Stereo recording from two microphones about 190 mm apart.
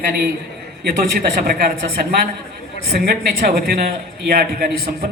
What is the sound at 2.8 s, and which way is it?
A man's voice, 55° right (ahead or behind).